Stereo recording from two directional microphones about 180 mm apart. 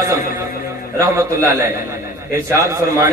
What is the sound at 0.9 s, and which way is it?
A man's voice, 15° right (ahead or behind).